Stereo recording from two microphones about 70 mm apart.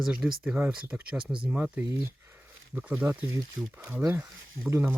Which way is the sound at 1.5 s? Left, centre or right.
Right.